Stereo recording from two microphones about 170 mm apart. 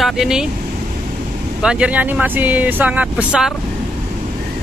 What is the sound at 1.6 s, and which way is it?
Speech, 5° right (ahead or behind).